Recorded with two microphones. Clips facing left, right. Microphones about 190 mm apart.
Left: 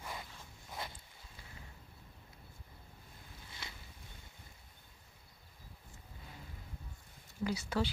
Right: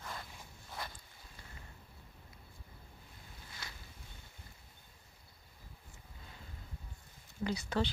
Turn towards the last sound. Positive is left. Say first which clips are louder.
# even
turn(degrees=10)  # may be behind; listen again after turning